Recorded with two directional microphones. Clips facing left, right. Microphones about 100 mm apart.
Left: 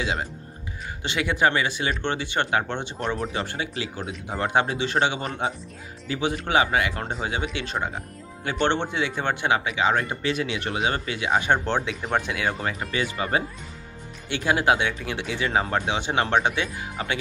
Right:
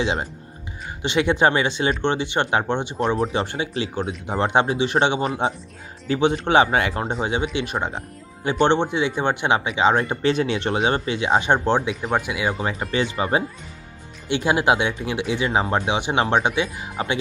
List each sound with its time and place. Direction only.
0.0 s speech: 25° right (ahead or behind)
7.5 s speech: 15° right (ahead or behind)
17.0 s speech: 30° right (ahead or behind)